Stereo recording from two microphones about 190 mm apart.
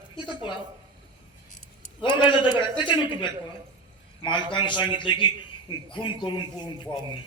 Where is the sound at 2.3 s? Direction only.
25° left (ahead or behind).